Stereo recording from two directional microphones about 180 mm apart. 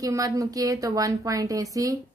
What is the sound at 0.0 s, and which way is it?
A woman's voice, 20° right (ahead or behind).